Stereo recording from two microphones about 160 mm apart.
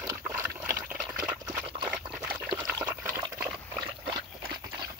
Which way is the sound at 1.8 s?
5° right (ahead or behind).